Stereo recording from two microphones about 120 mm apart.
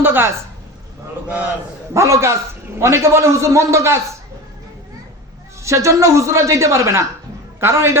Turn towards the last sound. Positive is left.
turn(degrees=-20)  # may be behind; listen again after turning